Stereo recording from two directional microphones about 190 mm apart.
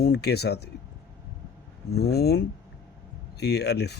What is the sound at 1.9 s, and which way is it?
Speech, 55° left (ahead or behind).